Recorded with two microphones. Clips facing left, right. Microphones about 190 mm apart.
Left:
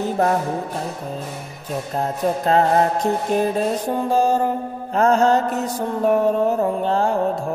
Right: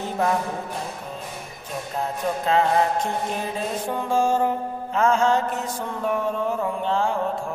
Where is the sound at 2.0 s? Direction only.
40° left (ahead or behind).